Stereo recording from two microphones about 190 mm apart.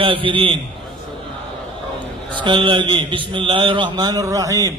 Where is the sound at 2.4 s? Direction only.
25° right (ahead or behind).